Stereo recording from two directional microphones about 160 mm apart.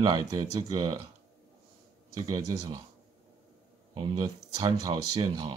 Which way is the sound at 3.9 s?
35° right (ahead or behind).